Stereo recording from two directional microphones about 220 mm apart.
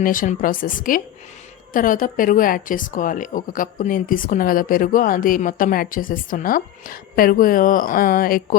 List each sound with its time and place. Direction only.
0.0 s a woman's voice: 40° left (ahead or behind)